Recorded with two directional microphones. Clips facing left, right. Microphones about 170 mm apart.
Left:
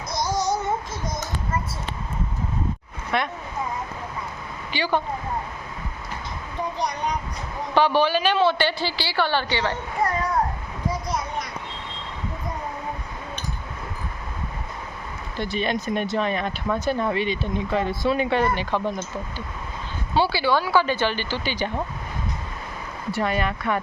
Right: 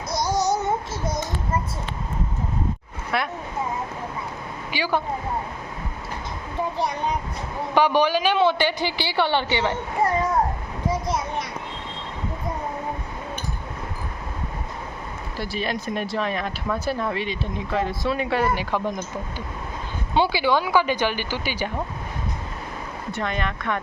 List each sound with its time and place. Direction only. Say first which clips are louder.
3.1 s speech: left 1 dB; 5° right (ahead or behind)
4.7 s a woman's voice: left 1 dB; 10° right (ahead or behind)
7.7 s a woman's voice: even; 15° right (ahead or behind)
15.4 s speech: left 3 dB; 5° right (ahead or behind)
20.1 s a woman's voice: right 1 dB; 15° right (ahead or behind)
23.1 s speech: left 3 dB; 5° left (ahead or behind)